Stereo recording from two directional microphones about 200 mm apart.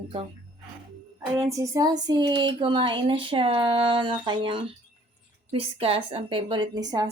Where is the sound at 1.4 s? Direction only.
15° right (ahead or behind).